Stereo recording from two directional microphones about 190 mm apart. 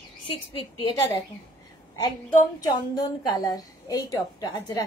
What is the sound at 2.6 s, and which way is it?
A woman's voice, 20° left (ahead or behind).